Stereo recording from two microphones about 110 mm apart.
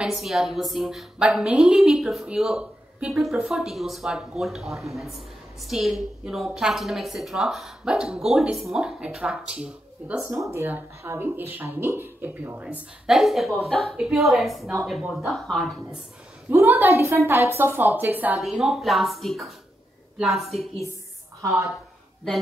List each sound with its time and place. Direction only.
0.0 s a woman's voice: centre (ahead or behind)
10.3 s speech: 25° right (ahead or behind)
13.0 s a woman's voice: centre (ahead or behind)
16.4 s a woman's voice: 20° right (ahead or behind)
18.4 s a woman's voice: centre (ahead or behind)
21.4 s a woman's voice: 25° right (ahead or behind)